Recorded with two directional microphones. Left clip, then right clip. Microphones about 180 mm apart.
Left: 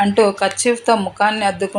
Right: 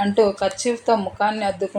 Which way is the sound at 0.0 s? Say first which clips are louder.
Left 4 dB; 25° left (ahead or behind).